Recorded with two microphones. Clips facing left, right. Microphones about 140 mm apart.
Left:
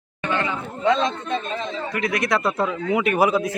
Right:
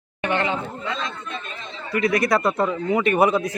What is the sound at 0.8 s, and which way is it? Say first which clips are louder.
Speech: left 9 dB; 90° left.